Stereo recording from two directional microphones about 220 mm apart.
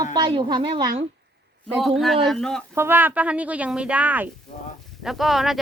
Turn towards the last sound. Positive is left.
turn(degrees=0)  # may be behind; listen again after turning